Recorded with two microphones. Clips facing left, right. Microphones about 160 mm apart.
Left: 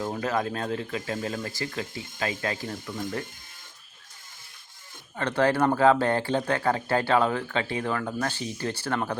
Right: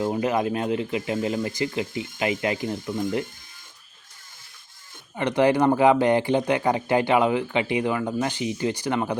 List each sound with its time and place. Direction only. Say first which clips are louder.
0.0 s speech: right 5 dB; 15° right (ahead or behind)
5.1 s speech: right 4 dB; 15° right (ahead or behind)